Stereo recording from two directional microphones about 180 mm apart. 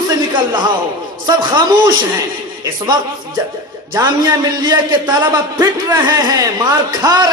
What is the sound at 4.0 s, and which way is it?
A man's voice, 15° right (ahead or behind).